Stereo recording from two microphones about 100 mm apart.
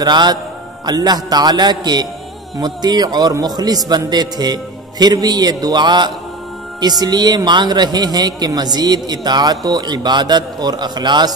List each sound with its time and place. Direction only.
0.0 s a man's voice: 45° right (ahead or behind)